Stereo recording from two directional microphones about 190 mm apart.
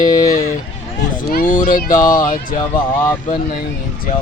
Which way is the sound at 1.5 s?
45° left (ahead or behind).